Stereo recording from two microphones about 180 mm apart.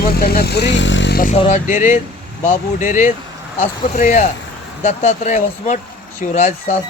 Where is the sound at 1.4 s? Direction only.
40° left (ahead or behind).